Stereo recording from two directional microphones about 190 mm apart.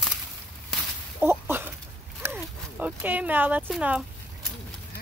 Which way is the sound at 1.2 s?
10° right (ahead or behind).